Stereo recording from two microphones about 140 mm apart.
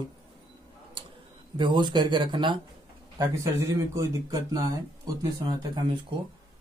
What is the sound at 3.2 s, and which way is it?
Speech, 20° right (ahead or behind).